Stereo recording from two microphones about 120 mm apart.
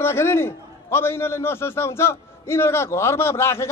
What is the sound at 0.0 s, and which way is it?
A man's voice, 20° left (ahead or behind).